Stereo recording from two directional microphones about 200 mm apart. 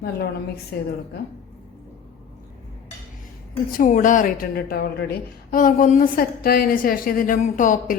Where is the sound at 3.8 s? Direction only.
40° left (ahead or behind).